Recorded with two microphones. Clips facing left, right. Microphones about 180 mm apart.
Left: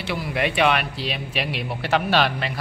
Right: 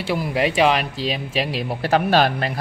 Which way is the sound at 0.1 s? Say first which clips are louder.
Right 4 dB; 35° right (ahead or behind).